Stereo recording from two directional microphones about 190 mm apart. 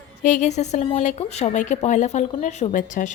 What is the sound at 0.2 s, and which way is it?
Speech, 40° left (ahead or behind).